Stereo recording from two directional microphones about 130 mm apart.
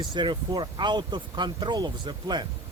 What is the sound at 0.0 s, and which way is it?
Speech, 35° right (ahead or behind).